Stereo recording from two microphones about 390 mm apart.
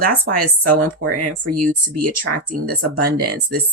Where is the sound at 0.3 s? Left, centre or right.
Right.